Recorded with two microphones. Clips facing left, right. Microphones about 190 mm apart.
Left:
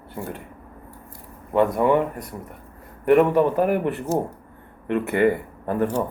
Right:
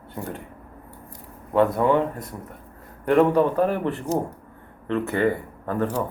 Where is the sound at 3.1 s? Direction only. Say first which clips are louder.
Left 1 dB; 5° left (ahead or behind).